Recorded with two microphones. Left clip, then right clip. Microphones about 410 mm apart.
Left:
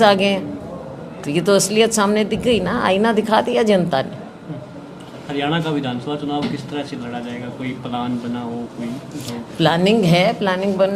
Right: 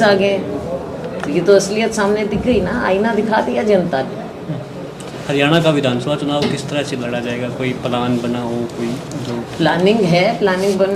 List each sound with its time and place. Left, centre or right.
0.0 s a woman's voice: left
5.3 s a man's voice: centre
9.6 s a woman's voice: left